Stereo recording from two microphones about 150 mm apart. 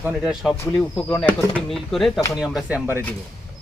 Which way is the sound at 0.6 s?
10° left (ahead or behind).